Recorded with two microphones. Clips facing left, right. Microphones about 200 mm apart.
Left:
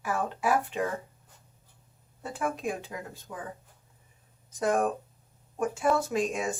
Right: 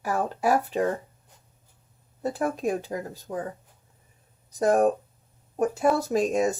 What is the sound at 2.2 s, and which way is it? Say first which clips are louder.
Speech: right 5 dB; 40° right (ahead or behind).